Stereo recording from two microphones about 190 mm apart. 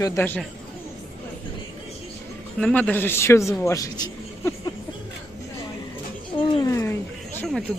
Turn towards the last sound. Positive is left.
turn(degrees=0)  # may be behind; listen again after turning